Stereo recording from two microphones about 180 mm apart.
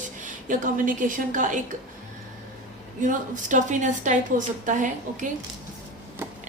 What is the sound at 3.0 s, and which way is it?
A woman's voice, 45° right (ahead or behind).